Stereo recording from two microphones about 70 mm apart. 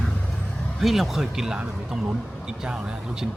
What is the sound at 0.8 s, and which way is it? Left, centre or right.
Speech, centre.